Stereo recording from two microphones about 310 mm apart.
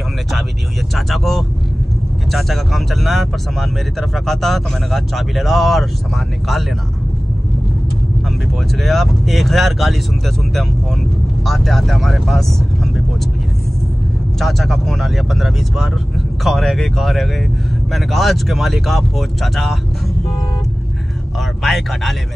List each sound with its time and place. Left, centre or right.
0.9 s speech: centre
8.7 s speech: centre
14.4 s speech: centre